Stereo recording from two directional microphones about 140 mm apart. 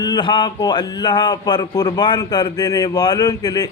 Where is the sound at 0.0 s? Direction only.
30° left (ahead or behind).